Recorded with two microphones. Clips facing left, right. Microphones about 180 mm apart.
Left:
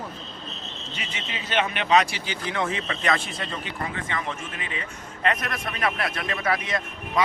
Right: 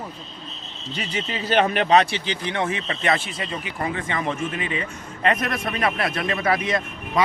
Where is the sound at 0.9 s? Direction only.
35° right (ahead or behind); by 4.7 s 20° right (ahead or behind).